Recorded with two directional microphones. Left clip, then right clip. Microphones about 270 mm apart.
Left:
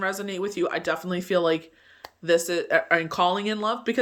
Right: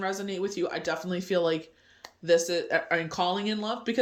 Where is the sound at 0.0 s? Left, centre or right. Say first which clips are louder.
Left 3 dB; centre.